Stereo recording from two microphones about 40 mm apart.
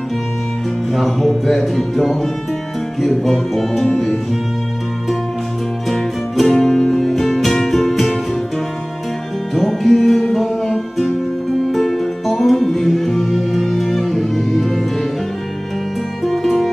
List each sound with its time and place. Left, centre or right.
0.9 s speech: centre
5.9 s music: centre
9.6 s music: centre
16.3 s music: centre